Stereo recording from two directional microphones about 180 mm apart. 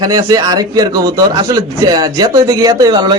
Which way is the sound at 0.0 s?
20° right (ahead or behind).